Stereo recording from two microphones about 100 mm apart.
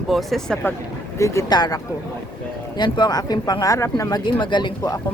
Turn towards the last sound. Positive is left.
turn(degrees=50)  # may be behind; listen again after turning